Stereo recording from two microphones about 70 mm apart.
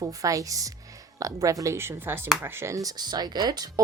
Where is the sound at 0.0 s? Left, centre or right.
Right.